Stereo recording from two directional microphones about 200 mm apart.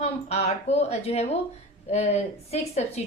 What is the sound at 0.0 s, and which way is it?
A woman's voice, 35° left (ahead or behind).